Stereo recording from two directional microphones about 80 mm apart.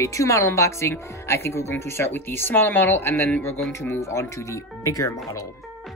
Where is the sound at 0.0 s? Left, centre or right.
Left.